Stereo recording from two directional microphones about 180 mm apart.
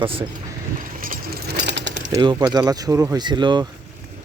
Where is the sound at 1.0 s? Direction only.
50° right (ahead or behind); by 1.9 s 75° right (ahead or behind).